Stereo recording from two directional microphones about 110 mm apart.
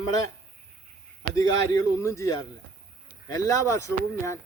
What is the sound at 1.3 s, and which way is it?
Speech, 30° left (ahead or behind).